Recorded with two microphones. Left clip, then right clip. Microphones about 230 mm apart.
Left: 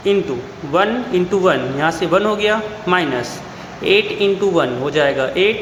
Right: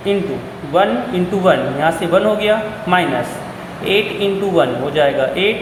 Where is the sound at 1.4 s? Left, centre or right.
Left.